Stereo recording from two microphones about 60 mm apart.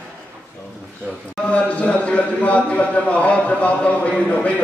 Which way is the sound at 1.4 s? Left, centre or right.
Left.